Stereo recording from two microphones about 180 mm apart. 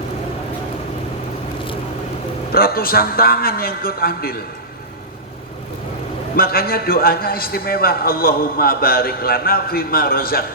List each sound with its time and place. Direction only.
2.5 s a man's voice: 55° left (ahead or behind)
6.3 s a man's voice: 55° left (ahead or behind)